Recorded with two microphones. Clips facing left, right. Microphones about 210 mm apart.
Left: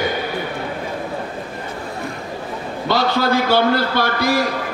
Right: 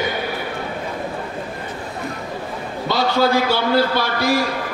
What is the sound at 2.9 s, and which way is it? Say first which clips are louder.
A man's voice: even; 55° left (ahead or behind).